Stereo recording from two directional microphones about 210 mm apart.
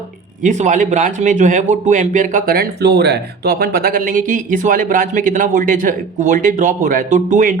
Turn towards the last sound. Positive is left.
turn(degrees=-35)  # may be behind; listen again after turning